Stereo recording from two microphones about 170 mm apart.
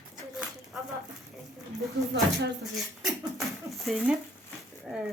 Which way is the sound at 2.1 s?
80° right.